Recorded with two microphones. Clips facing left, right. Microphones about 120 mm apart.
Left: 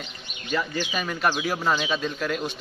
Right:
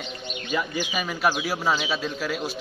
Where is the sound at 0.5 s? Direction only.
10° right (ahead or behind).